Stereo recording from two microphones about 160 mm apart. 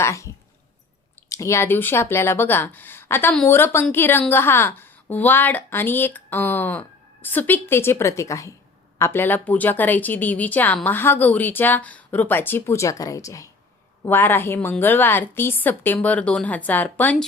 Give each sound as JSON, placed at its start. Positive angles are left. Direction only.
{"t": 0.0, "sound": "speech", "side_deg": 20}